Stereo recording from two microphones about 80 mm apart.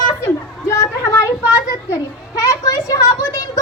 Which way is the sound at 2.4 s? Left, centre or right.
Left.